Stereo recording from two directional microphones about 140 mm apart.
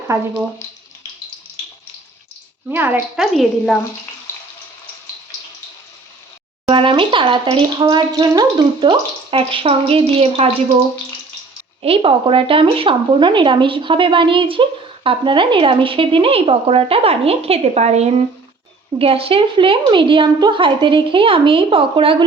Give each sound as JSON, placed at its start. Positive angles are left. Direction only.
{"t": 0.1, "sound": "speech", "side_deg": -20}
{"t": 2.6, "sound": "a woman's voice", "side_deg": -15}
{"t": 3.2, "sound": "speech", "side_deg": 0}
{"t": 6.7, "sound": "speech", "side_deg": -35}
{"t": 11.8, "sound": "speech", "side_deg": -40}